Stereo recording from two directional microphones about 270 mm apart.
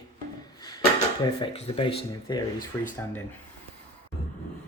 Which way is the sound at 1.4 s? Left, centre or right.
Centre.